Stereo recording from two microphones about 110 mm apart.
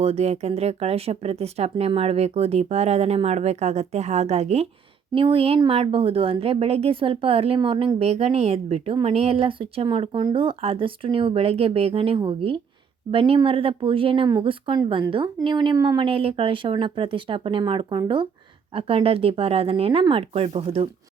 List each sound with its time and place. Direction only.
0.0 s speech: 75° right (ahead or behind)
5.1 s speech: 55° right (ahead or behind)
18.7 s speech: 55° right (ahead or behind)